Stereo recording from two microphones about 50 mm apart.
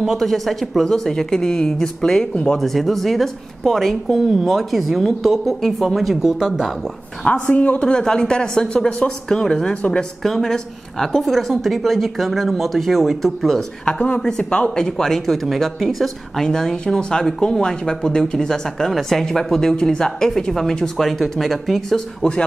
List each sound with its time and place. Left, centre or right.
0.0 s speech: centre
2.6 s a woman's voice: centre
7.2 s a woman's voice: left
7.8 s speech: centre
9.8 s a woman's voice: left
10.2 s a woman's voice: centre
13.8 s a woman's voice: left; by 16.4 s centre
16.4 s speech: centre